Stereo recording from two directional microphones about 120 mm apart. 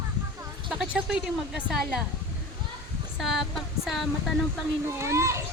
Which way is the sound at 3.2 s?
Centre (ahead or behind).